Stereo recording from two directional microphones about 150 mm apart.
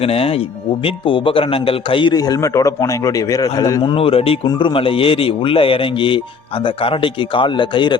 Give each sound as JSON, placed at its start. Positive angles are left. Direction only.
{"t": 0.0, "sound": "a man's voice", "side_deg": 40}
{"t": 3.9, "sound": "speech", "side_deg": 40}